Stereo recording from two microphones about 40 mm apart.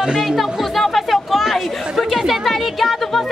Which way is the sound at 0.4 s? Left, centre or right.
Centre.